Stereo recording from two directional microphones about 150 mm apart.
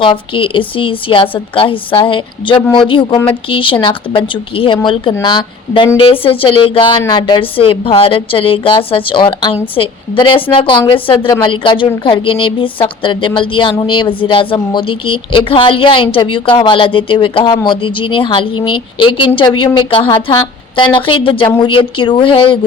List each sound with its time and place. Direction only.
0.0 s a woman's voice: 35° left (ahead or behind)